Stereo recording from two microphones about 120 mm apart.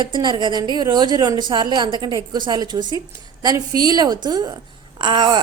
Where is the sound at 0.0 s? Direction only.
40° right (ahead or behind).